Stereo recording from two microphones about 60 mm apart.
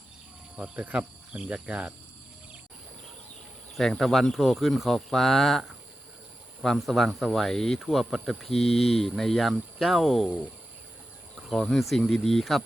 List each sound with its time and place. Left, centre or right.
0.5 s speech: right
3.8 s speech: centre
11.4 s speech: centre